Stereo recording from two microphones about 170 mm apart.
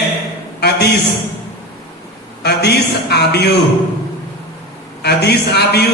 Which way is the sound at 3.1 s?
75° left (ahead or behind).